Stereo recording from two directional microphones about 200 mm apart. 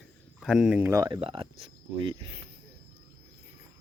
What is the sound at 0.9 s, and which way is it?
Speech, 20° right (ahead or behind).